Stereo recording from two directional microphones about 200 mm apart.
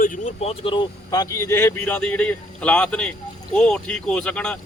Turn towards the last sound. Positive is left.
turn(degrees=5)  # may be behind; listen again after turning